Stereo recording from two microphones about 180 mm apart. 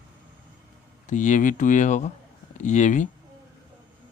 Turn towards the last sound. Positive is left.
turn(degrees=45)  # may be behind; listen again after turning